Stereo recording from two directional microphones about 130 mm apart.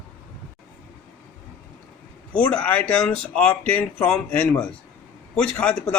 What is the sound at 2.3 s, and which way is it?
Speech, 10° left (ahead or behind).